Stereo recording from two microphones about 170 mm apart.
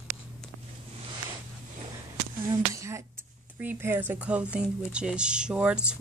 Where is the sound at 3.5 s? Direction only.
10° right (ahead or behind).